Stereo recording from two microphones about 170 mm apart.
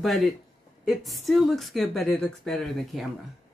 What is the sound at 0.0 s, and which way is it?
Speech, centre (ahead or behind).